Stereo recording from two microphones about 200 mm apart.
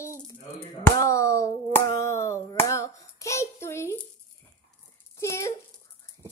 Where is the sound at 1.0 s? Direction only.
15° left (ahead or behind).